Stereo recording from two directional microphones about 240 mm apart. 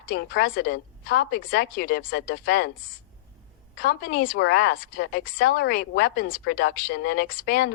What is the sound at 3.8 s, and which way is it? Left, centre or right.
Speech, left.